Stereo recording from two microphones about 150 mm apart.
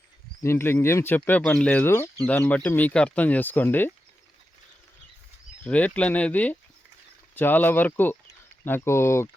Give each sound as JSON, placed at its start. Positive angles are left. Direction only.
{"t": 0.4, "sound": "speech", "side_deg": 15}
{"t": 5.6, "sound": "speech", "side_deg": 10}